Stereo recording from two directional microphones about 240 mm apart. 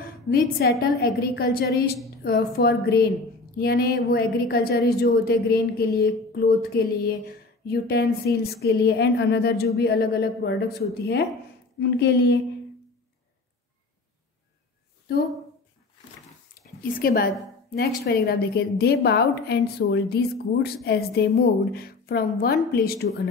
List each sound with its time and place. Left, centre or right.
0.3 s a woman's voice: left
7.6 s a woman's voice: left
15.1 s speech: left
16.8 s a woman's voice: left